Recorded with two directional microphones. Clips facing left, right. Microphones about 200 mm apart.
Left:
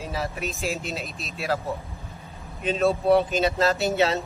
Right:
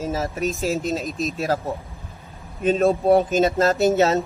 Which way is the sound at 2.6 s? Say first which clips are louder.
Right 4 dB; 45° right (ahead or behind).